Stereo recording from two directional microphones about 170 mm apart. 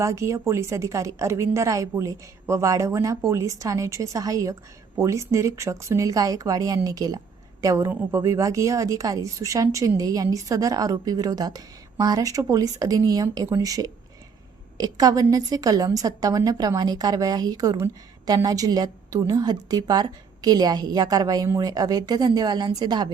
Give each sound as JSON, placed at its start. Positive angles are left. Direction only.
{"t": 0.0, "sound": "a woman's voice", "side_deg": -15}